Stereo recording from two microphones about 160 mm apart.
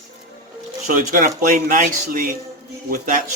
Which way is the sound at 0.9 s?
55° right (ahead or behind).